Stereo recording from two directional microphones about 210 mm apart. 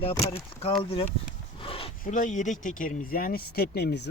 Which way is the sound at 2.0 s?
35° left (ahead or behind).